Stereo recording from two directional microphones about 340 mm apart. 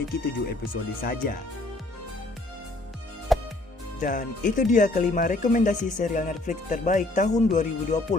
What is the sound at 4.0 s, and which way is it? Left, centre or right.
Speech, left.